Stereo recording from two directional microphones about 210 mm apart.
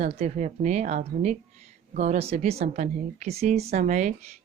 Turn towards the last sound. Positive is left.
turn(degrees=-35)  # may be behind; listen again after turning